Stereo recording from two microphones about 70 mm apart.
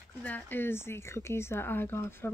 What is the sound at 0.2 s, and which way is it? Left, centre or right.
A woman's voice, left.